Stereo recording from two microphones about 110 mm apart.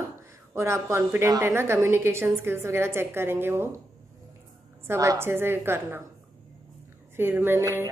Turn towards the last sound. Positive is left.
turn(degrees=-20)  # may be behind; listen again after turning